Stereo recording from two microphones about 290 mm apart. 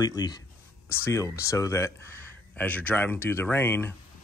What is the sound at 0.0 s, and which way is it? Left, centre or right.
Speech, centre.